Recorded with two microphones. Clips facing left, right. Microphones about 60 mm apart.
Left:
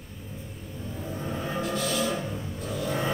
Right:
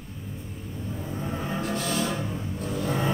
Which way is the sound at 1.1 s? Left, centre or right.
Right.